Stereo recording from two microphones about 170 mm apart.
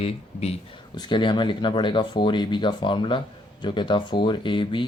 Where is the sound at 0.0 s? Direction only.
35° left (ahead or behind).